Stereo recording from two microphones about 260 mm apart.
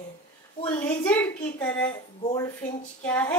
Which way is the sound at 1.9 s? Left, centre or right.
Centre.